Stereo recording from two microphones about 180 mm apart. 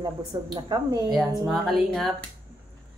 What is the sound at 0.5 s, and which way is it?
Speech, 25° right (ahead or behind).